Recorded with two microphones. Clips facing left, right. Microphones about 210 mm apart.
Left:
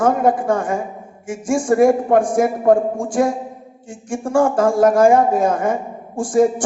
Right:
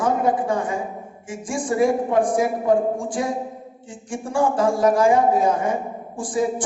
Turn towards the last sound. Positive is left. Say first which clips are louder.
# left 8 dB
turn(degrees=45)  # may be behind; listen again after turning